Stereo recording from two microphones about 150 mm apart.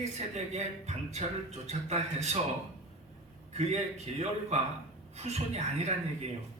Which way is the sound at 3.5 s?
45° right (ahead or behind).